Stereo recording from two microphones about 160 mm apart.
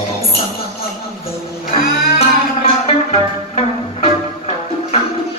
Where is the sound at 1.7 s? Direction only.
40° left (ahead or behind).